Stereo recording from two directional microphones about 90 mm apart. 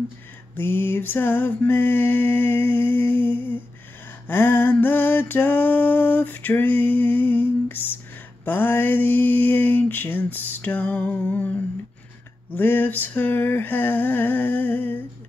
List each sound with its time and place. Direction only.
0.6 s mantra: 25° left (ahead or behind)
4.3 s a sound: 25° left (ahead or behind)
8.5 s mantra: 25° left (ahead or behind)
12.5 s mantra: 20° left (ahead or behind)